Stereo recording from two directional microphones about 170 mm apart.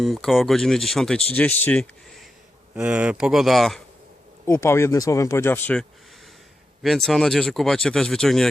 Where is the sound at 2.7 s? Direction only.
5° right (ahead or behind).